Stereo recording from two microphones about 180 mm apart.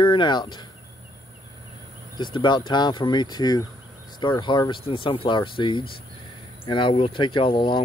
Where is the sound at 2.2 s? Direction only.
25° left (ahead or behind).